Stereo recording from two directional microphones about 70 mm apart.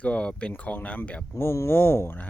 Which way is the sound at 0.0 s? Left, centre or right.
Centre.